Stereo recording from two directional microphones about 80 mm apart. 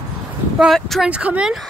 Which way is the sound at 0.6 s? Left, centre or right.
Centre.